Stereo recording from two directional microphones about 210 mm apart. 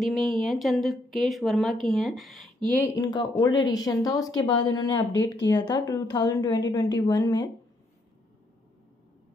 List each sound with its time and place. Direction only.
0.0 s speech: centre (ahead or behind)
3.1 s a woman's voice: 20° left (ahead or behind)